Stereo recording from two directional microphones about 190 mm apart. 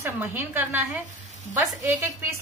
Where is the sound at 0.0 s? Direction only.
10° right (ahead or behind).